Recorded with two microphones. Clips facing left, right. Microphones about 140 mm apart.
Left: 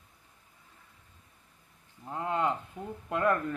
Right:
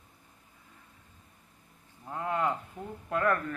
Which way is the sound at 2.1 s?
20° left (ahead or behind).